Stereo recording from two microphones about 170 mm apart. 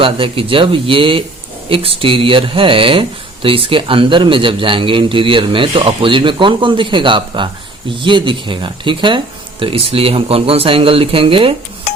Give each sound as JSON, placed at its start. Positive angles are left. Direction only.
{"t": 0.0, "sound": "speech", "side_deg": -30}